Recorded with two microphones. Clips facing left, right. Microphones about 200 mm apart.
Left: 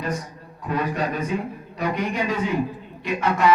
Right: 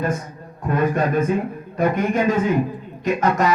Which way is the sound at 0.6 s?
50° right (ahead or behind).